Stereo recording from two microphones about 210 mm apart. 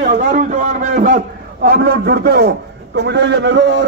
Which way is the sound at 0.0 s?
35° right (ahead or behind).